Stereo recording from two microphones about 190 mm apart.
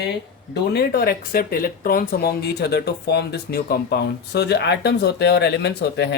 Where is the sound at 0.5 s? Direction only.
60° left (ahead or behind).